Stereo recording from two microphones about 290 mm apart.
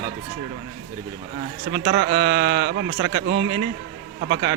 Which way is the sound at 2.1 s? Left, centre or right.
Centre.